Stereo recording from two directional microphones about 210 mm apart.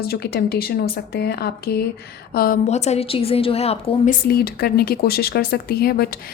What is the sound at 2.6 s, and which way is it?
A woman's voice, 30° left (ahead or behind).